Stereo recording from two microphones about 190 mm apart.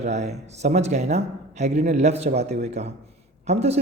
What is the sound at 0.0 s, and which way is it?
Speech, 35° right (ahead or behind).